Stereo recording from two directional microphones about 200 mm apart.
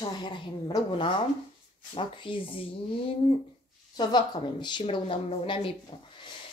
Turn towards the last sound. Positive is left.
turn(degrees=25)  # may be behind; listen again after turning